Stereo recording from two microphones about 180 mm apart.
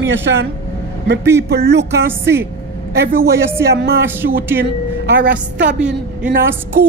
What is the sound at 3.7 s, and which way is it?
Speech, 60° right (ahead or behind).